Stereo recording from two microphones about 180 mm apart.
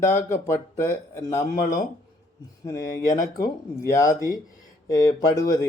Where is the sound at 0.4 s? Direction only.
15° left (ahead or behind).